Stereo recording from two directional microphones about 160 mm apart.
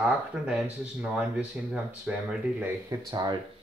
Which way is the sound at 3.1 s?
25° right (ahead or behind).